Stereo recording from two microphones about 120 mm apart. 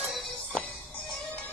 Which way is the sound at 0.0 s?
Centre (ahead or behind).